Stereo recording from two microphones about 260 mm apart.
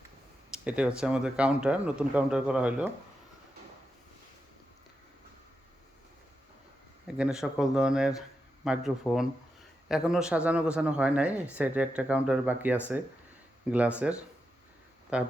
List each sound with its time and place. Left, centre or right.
0.5 s speech: centre
7.2 s speech: centre